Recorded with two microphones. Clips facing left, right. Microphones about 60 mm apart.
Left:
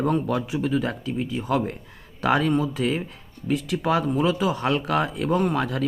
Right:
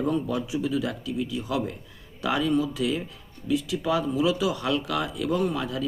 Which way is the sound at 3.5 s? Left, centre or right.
Left.